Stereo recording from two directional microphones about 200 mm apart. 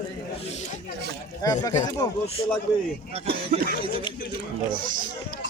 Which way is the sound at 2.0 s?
15° left (ahead or behind).